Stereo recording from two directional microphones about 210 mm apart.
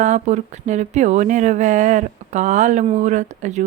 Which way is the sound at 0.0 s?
35° right (ahead or behind).